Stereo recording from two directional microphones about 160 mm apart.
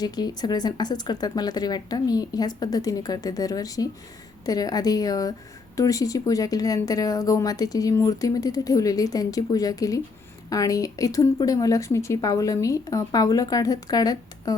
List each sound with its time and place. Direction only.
0.0 s speech: 25° left (ahead or behind)